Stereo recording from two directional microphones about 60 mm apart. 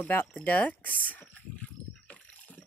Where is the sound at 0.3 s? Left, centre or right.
Left.